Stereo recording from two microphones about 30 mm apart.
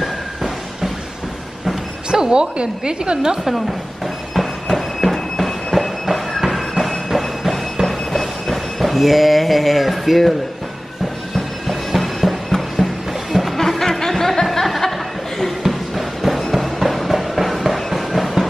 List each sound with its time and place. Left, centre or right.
2.0 s music: right
2.3 s a woman's voice: right
4.4 s train: centre
6.5 s music: centre
7.2 s a sound: centre
11.3 s music: centre
15.6 s music: centre
17.1 s train: centre